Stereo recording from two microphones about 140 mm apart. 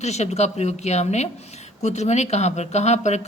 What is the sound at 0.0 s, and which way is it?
Speech, 50° left (ahead or behind).